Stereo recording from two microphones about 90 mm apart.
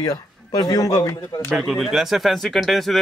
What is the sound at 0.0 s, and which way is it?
A man's voice, 45° left (ahead or behind).